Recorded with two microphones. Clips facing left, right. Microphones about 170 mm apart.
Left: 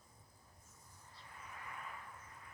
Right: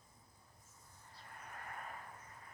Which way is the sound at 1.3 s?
50° right (ahead or behind).